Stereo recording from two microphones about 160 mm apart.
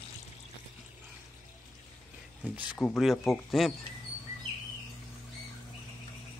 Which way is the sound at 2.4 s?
5° right (ahead or behind).